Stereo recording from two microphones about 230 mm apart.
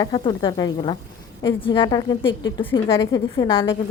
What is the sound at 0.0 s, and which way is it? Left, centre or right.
Speech, centre.